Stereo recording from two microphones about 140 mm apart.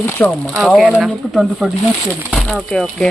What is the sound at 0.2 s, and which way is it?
Speech, 15° left (ahead or behind).